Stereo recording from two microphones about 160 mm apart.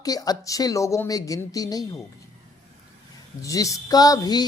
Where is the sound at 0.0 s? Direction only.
25° left (ahead or behind).